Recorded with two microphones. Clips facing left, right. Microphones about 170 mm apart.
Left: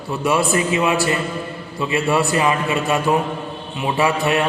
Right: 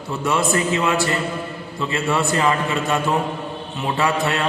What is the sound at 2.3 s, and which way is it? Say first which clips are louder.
Mantra: left 1 dB; 15° left (ahead or behind).